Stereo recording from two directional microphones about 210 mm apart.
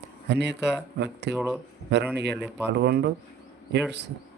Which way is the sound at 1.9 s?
55° right (ahead or behind).